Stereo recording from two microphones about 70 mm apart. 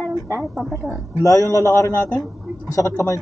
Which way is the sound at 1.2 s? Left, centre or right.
Left.